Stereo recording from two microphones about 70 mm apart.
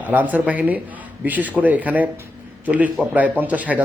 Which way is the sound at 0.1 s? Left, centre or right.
Right.